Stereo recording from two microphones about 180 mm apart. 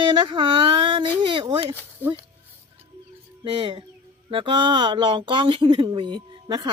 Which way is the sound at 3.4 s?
30° right (ahead or behind).